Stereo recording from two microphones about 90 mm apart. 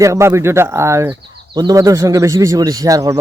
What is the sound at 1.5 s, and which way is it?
Speech, 45° right (ahead or behind).